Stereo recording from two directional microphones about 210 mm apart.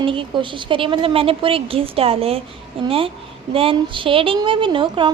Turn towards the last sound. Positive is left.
turn(degrees=-25)  # may be behind; listen again after turning